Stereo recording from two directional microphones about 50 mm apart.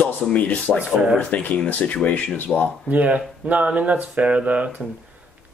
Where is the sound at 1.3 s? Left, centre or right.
Left.